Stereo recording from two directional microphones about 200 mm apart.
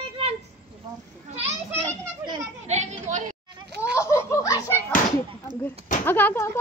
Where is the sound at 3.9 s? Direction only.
15° left (ahead or behind).